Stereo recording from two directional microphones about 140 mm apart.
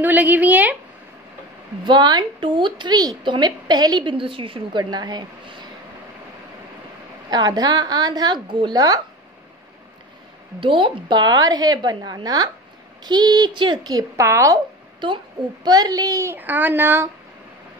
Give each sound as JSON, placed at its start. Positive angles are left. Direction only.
{"t": 0.0, "sound": "a woman's voice", "side_deg": -10}
{"t": 1.9, "sound": "a woman's voice", "side_deg": -30}
{"t": 7.2, "sound": "speech", "side_deg": -30}
{"t": 10.6, "sound": "speech", "side_deg": -40}